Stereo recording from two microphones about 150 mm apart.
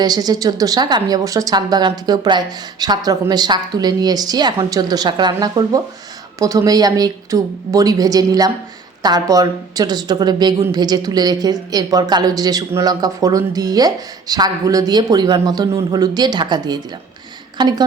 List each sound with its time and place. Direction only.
0.0 s speech: 25° right (ahead or behind)